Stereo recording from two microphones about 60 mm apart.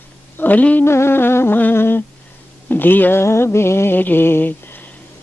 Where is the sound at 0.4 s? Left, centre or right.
Left.